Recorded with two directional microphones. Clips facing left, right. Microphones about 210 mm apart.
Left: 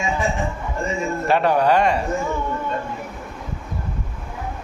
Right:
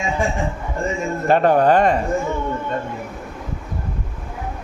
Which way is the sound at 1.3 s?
45° right (ahead or behind).